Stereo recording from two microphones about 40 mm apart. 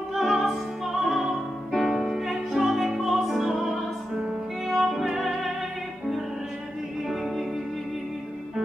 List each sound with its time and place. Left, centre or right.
0.1 s music: centre
7.1 s music: centre